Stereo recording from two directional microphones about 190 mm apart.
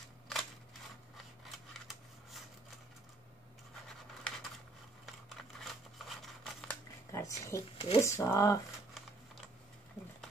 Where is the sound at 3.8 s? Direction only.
5° left (ahead or behind).